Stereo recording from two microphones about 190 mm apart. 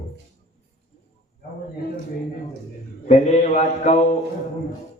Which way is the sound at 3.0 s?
35° left (ahead or behind).